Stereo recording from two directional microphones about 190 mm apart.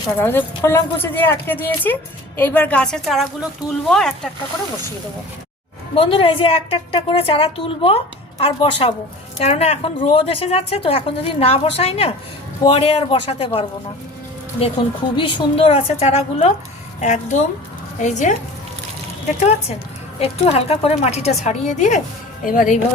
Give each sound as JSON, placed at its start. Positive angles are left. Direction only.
{"t": 0.2, "sound": "speech", "side_deg": 10}
{"t": 5.9, "sound": "a woman's voice", "side_deg": 30}
{"t": 20.1, "sound": "a woman's voice", "side_deg": 30}